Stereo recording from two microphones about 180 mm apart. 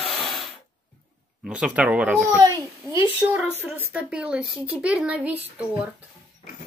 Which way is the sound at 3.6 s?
10° right (ahead or behind).